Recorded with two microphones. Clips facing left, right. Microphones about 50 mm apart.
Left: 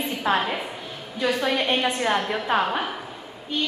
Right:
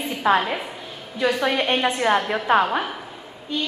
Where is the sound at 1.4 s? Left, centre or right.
Right.